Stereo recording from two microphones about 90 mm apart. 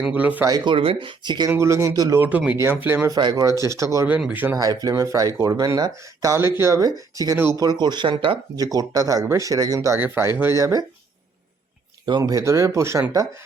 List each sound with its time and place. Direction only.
0.0 s speech: 15° right (ahead or behind)
0.4 s speech: 55° right (ahead or behind)
1.5 s speech: 30° right (ahead or behind)
1.9 s speech: 45° right (ahead or behind)
2.1 s speech: 20° right (ahead or behind)
3.1 s speech: 50° right (ahead or behind)
3.4 s speech: 35° right (ahead or behind)
4.3 s speech: 20° right (ahead or behind)
4.5 s speech: 45° right (ahead or behind)
6.2 s speech: 30° right (ahead or behind); by 8.4 s 70° right (ahead or behind)
8.5 s speech: 45° right (ahead or behind); by 10.3 s 30° right (ahead or behind)
10.5 s speech: 40° right (ahead or behind)
12.0 s speech: 50° right (ahead or behind); by 13.2 s 35° right (ahead or behind)